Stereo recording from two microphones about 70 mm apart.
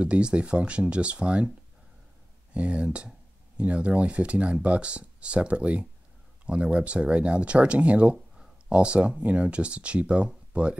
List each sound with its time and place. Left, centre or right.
0.0 s speech: centre
2.5 s speech: centre